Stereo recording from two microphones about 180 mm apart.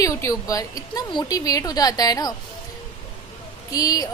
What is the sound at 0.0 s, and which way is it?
Speech, 20° left (ahead or behind).